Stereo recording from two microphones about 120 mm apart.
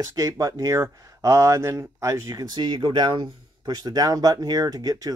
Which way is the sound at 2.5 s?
40° right (ahead or behind).